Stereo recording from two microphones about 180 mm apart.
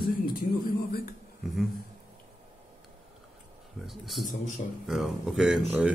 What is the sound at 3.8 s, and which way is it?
Speech, centre (ahead or behind).